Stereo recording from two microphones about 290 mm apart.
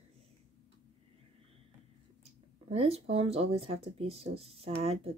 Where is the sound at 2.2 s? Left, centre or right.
Centre.